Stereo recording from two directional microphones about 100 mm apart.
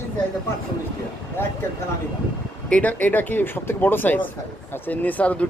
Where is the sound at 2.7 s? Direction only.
15° left (ahead or behind).